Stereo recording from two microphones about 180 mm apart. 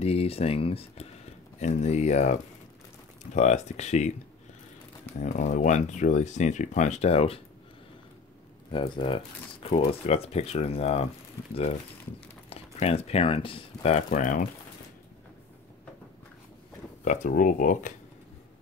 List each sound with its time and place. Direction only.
0.0 s speech: 35° left (ahead or behind)
3.3 s speech: 40° left (ahead or behind)
5.2 s speech: 40° left (ahead or behind)
8.7 s speech: 30° left (ahead or behind)
12.4 s speech: 35° left (ahead or behind)
17.0 s speech: 45° left (ahead or behind)